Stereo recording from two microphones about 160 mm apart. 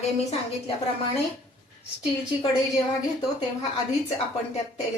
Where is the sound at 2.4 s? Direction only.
30° left (ahead or behind).